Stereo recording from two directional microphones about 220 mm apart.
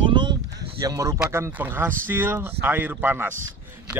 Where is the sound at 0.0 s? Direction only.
20° right (ahead or behind).